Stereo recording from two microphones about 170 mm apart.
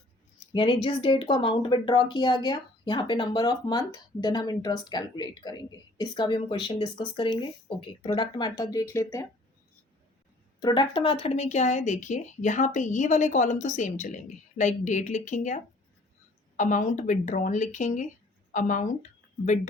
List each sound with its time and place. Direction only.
0.5 s speech: 30° left (ahead or behind)
10.6 s speech: 25° left (ahead or behind); by 15.5 s 45° left (ahead or behind)
16.6 s speech: 50° left (ahead or behind)